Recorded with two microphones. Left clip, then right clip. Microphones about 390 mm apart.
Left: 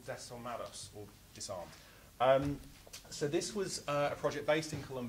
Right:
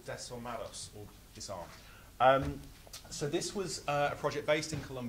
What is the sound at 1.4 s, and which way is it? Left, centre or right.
Speech, centre.